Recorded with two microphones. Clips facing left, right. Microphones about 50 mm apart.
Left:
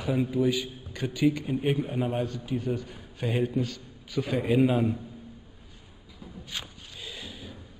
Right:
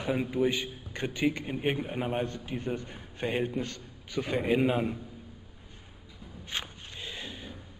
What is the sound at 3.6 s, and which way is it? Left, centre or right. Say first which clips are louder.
A man's voice: left 4 dB; centre.